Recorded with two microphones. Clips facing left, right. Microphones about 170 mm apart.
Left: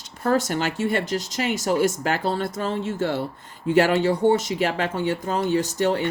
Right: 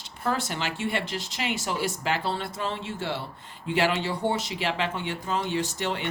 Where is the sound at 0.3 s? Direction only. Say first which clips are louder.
Left 7 dB; 45° left (ahead or behind).